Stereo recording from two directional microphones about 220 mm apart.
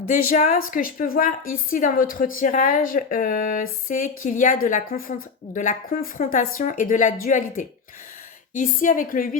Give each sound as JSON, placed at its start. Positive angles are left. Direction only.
{"t": 0.1, "sound": "a woman's voice", "side_deg": 35}